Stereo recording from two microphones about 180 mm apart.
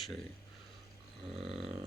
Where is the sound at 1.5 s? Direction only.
35° right (ahead or behind).